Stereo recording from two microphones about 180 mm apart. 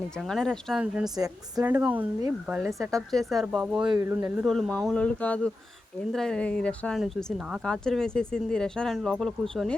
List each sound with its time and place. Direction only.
0.2 s speech: centre (ahead or behind)
1.1 s a woman's voice: 20° right (ahead or behind); by 3.8 s 5° right (ahead or behind)
3.8 s speech: 20° right (ahead or behind)
4.4 s speech: centre (ahead or behind)